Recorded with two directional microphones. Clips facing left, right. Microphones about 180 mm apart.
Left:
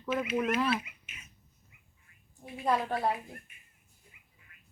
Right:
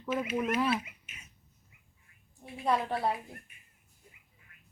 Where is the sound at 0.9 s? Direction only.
35° right (ahead or behind).